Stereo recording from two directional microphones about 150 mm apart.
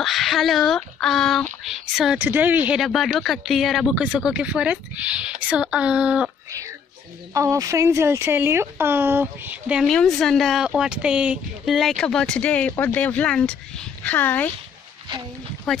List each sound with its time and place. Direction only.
0.0 s speech: centre (ahead or behind)
2.1 s speech: 10° right (ahead or behind)
7.3 s speech: 20° right (ahead or behind)
9.8 s speech: 5° left (ahead or behind)
15.7 s speech: centre (ahead or behind)